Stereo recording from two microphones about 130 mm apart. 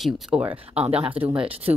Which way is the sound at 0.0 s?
10° right (ahead or behind).